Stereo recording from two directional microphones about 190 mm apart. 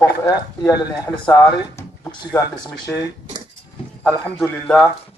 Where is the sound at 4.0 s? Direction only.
5° left (ahead or behind).